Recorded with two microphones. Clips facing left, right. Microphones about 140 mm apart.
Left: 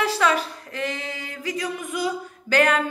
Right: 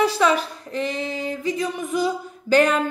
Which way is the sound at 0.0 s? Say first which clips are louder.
Right 3 dB; 20° right (ahead or behind).